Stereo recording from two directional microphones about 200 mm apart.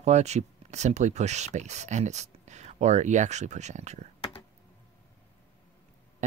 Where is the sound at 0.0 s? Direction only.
35° right (ahead or behind).